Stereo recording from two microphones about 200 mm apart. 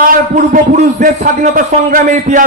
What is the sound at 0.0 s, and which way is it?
A man's voice, 45° right (ahead or behind).